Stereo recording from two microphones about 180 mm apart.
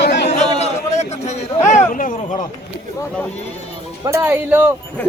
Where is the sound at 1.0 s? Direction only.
40° left (ahead or behind).